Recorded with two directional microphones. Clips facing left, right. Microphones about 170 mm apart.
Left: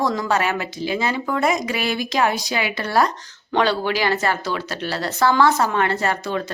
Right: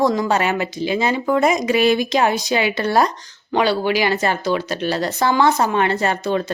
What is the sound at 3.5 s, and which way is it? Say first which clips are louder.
Speech: right 2 dB; 10° right (ahead or behind).